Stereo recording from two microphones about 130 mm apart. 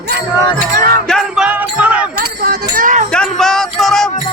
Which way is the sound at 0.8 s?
90° right.